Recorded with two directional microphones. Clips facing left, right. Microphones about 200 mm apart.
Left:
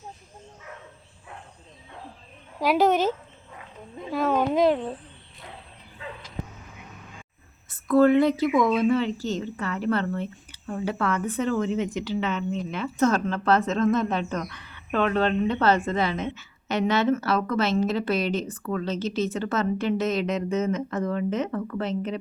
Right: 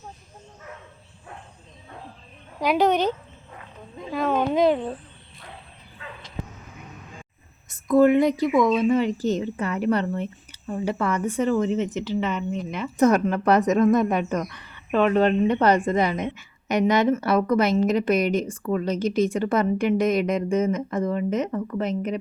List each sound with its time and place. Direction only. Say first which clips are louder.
2.6 s a woman's voice: even; centre (ahead or behind)
7.9 s a woman's voice: right 1 dB; 15° right (ahead or behind)